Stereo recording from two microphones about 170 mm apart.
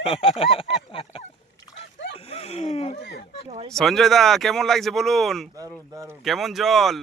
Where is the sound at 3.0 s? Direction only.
80° left.